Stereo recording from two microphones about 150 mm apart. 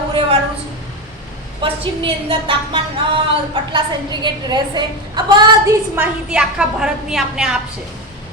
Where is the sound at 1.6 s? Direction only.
35° right (ahead or behind).